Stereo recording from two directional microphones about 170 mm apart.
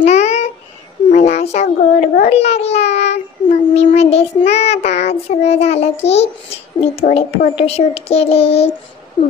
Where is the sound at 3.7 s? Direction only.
40° left (ahead or behind).